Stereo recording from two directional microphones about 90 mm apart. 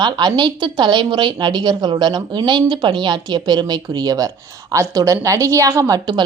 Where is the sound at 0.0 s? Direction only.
50° right (ahead or behind); by 5.8 s 35° right (ahead or behind).